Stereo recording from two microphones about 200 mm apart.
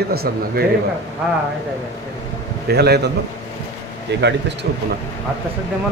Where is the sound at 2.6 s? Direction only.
55° right (ahead or behind).